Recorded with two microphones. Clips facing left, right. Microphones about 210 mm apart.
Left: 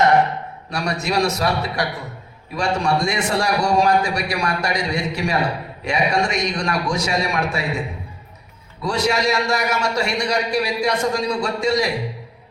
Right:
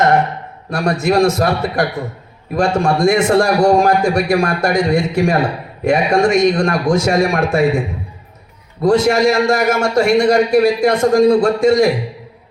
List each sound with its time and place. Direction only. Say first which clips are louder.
0.7 s a man's voice: right 8 dB; 50° right (ahead or behind)